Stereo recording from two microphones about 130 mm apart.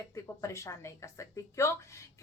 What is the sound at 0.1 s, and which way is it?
Speech, 20° left (ahead or behind).